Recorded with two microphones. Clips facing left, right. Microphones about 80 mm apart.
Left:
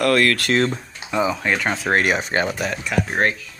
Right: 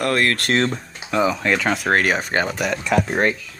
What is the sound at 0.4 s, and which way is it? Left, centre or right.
Speech, right.